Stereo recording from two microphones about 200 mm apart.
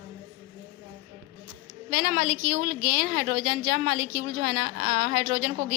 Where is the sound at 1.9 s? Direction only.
55° right (ahead or behind).